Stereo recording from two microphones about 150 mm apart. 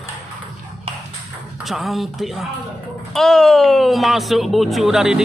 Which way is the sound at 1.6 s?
Centre (ahead or behind).